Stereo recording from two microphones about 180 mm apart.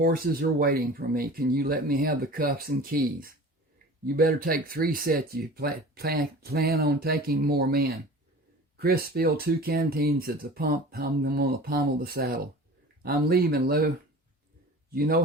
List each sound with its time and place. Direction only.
0.0 s speech: 55° right (ahead or behind)
14.8 s a man's voice: 55° right (ahead or behind)